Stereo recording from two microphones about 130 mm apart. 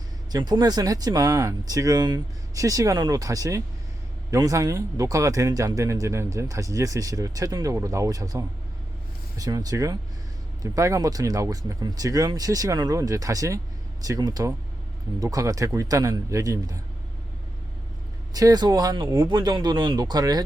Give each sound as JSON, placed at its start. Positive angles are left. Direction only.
{"t": 0.3, "sound": "speech", "side_deg": -30}
{"t": 18.3, "sound": "speech", "side_deg": -30}